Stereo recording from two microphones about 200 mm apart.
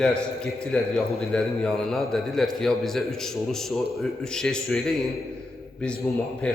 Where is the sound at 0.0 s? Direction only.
5° left (ahead or behind).